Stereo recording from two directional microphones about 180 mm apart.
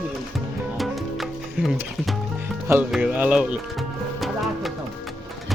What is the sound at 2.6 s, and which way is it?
Speech, 10° right (ahead or behind).